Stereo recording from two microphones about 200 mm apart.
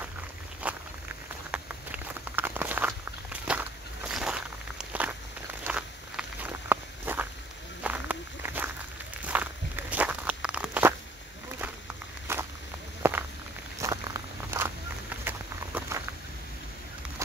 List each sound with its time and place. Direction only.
0.7 s walk: 5° right (ahead or behind)
12.3 s walk: 10° right (ahead or behind)
13.7 s a sound: 15° right (ahead or behind)